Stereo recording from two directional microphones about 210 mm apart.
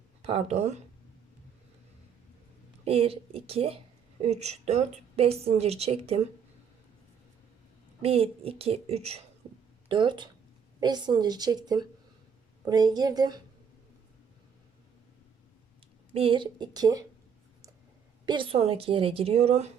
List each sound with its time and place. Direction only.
0.2 s speech: 30° right (ahead or behind)
2.8 s a woman's voice: 25° right (ahead or behind)
8.0 s a woman's voice: 25° right (ahead or behind)
16.1 s a woman's voice: 25° right (ahead or behind)
18.3 s a woman's voice: 25° right (ahead or behind)